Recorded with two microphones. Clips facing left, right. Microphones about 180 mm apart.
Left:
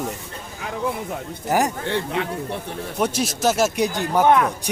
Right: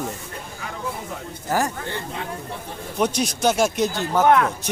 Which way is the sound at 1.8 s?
70° left (ahead or behind).